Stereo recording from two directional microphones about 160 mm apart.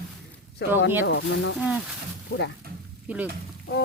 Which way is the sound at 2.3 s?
90° left.